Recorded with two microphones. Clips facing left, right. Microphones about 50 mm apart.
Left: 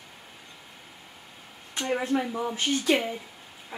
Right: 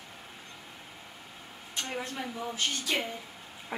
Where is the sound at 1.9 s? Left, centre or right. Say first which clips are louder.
Left 12 dB; left.